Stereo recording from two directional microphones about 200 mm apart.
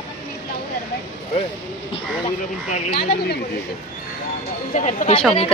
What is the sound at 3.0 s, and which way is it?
Speech, 55° left (ahead or behind).